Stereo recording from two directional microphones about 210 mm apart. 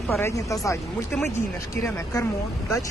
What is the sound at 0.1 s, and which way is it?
Speech, 15° left (ahead or behind).